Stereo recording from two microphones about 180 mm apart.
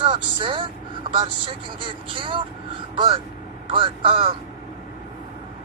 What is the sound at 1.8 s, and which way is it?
A man's voice, 30° right (ahead or behind).